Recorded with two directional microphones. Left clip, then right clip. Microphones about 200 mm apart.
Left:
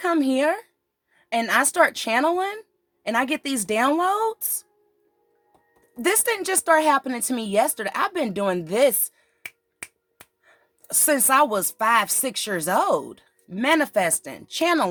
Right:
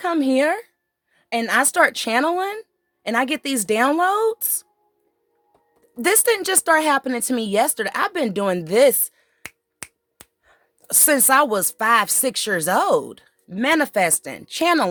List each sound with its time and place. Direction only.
0.0 s a woman's voice: 35° right (ahead or behind)
6.0 s a woman's voice: 40° right (ahead or behind)